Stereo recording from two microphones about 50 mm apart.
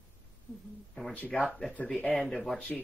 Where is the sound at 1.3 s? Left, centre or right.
Centre.